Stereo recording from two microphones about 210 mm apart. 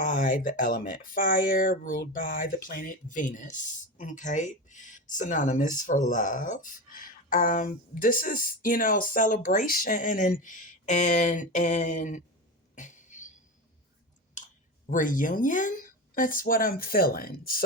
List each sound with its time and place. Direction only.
0.0 s speech: 40° left (ahead or behind)
12.7 s a sound: 35° left (ahead or behind)
14.8 s speech: 40° left (ahead or behind)